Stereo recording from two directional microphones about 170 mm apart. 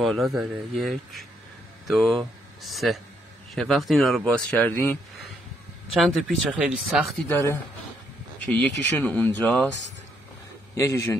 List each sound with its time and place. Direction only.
0.0 s speech: centre (ahead or behind)
5.9 s speech: centre (ahead or behind)
7.2 s speech: 15° left (ahead or behind)
10.8 s speech: 15° left (ahead or behind)